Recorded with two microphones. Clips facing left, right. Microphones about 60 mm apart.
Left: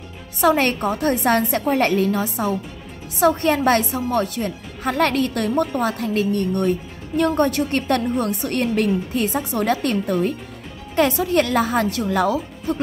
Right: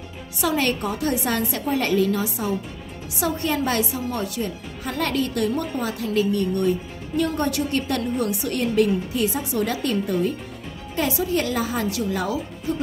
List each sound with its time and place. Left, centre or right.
0.4 s a woman's voice: left